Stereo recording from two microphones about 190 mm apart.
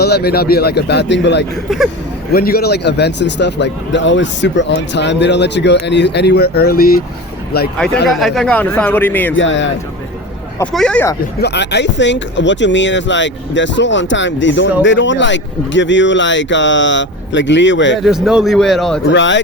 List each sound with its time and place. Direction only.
0.0 s a man's voice: 60° left (ahead or behind)
2.3 s a man's voice: 55° left (ahead or behind)
8.0 s speech: centre (ahead or behind)
9.3 s speech: 75° left (ahead or behind)
10.6 s speech: 5° left (ahead or behind)
11.3 s speech: 60° left (ahead or behind)
18.0 s a man's voice: centre (ahead or behind)
19.1 s speech: 75° left (ahead or behind)